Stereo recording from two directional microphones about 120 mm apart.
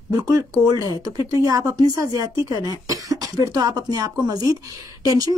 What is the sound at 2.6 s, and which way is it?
Cough, 30° right (ahead or behind).